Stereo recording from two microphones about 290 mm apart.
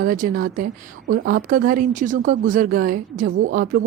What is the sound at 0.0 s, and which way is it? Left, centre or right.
Speech, right.